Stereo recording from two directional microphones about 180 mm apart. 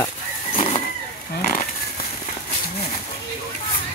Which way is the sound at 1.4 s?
50° left (ahead or behind).